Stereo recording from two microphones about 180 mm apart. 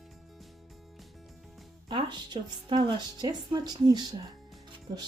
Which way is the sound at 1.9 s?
25° right (ahead or behind).